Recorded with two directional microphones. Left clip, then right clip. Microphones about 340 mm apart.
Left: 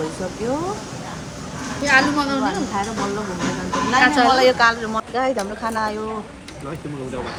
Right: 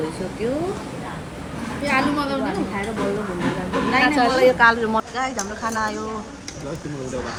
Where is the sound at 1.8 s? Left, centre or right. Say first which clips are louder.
Left 4 dB; left.